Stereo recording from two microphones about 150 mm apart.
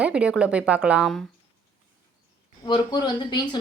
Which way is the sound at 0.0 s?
5° right (ahead or behind).